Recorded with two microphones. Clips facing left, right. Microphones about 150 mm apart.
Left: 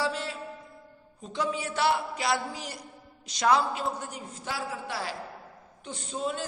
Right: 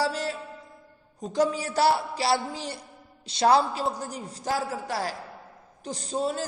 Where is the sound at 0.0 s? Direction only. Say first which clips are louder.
Right 3 dB; 40° right (ahead or behind).